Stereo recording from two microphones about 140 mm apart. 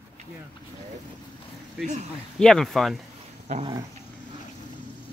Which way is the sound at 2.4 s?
Centre (ahead or behind).